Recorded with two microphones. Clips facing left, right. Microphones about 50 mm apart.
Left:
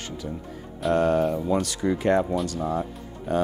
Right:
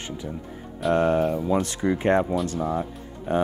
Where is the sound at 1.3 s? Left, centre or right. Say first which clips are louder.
Right 1 dB; centre.